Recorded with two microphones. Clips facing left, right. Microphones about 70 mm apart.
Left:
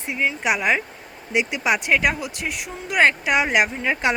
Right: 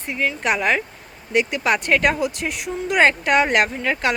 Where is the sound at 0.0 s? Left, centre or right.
Centre.